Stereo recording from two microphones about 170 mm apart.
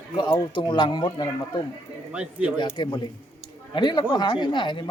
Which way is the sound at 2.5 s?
25° left (ahead or behind).